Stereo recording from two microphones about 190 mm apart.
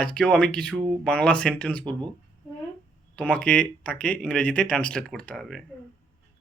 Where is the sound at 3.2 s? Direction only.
5° left (ahead or behind).